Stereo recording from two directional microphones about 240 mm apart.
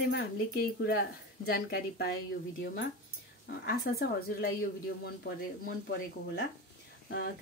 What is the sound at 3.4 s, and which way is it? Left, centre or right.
A woman's voice, left.